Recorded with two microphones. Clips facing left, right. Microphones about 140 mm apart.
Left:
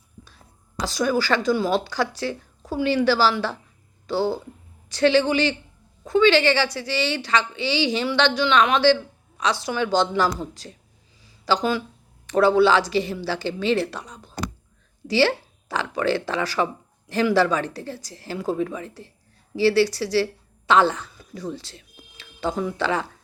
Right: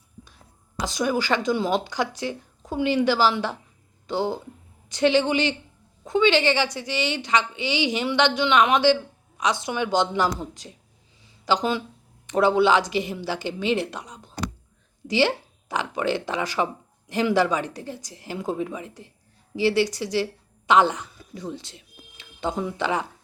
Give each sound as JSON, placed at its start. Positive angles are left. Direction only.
{"t": 0.8, "sound": "a woman's voice", "side_deg": -20}
{"t": 11.2, "sound": "a sound", "side_deg": -20}
{"t": 12.2, "sound": "a woman's voice", "side_deg": -20}